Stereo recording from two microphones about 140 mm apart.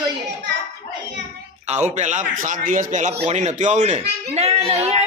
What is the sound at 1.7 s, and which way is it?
A man's voice, 55° right (ahead or behind).